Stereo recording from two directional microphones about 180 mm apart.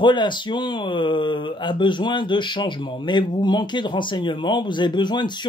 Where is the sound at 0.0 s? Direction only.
25° left (ahead or behind).